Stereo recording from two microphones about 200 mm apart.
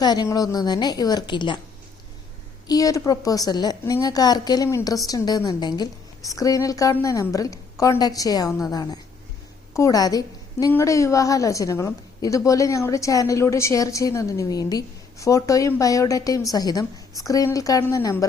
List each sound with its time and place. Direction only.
0.0 s a woman's voice: 20° left (ahead or behind)
2.6 s a woman's voice: 15° left (ahead or behind)